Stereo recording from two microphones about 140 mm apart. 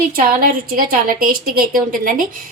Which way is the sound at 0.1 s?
90° right.